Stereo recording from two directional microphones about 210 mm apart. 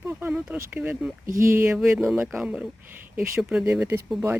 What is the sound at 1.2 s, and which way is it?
Speech, 40° right (ahead or behind).